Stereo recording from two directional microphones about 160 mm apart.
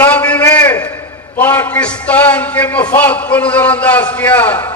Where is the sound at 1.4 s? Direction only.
10° left (ahead or behind).